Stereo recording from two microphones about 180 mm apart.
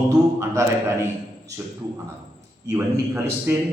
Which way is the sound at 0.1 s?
15° right (ahead or behind).